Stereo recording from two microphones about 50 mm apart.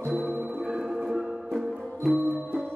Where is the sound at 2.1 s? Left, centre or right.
Right.